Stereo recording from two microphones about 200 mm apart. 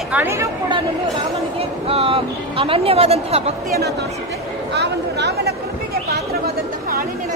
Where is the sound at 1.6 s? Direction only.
30° right (ahead or behind).